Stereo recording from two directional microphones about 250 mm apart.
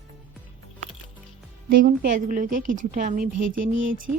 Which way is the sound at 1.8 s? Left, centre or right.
Right.